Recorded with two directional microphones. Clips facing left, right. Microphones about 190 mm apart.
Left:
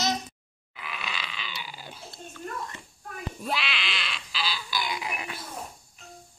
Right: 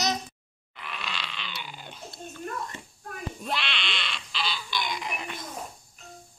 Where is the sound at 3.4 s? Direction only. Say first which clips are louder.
Left 2 dB; 5° left (ahead or behind).